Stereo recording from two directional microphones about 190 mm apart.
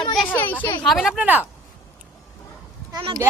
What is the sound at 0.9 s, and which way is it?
Speech, centre (ahead or behind).